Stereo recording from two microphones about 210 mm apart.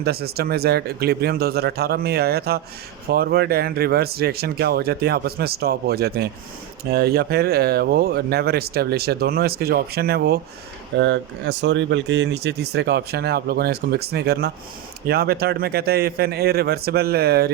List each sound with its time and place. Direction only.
0.0 s speech: 50° right (ahead or behind)
10.9 s speech: 60° right (ahead or behind)